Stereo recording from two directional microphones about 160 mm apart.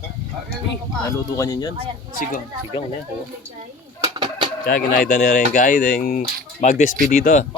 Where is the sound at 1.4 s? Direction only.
20° left (ahead or behind).